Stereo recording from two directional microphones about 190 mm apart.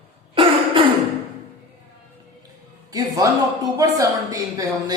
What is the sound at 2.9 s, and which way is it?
A woman's voice, 20° right (ahead or behind).